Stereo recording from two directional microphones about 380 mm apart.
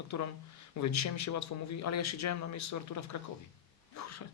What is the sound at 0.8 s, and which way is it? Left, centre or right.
Speech, left.